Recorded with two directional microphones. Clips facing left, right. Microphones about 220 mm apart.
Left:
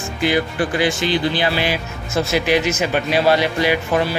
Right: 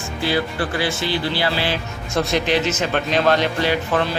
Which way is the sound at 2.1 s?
5° left (ahead or behind).